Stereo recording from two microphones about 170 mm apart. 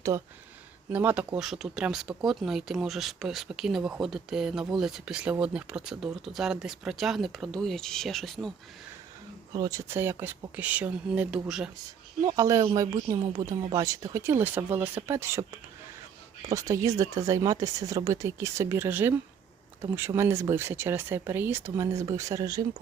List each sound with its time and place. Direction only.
0.9 s speech: 10° right (ahead or behind)
9.5 s speech: 20° right (ahead or behind); by 11.7 s 5° right (ahead or behind)
12.2 s speech: 20° right (ahead or behind)
16.5 s speech: 20° right (ahead or behind)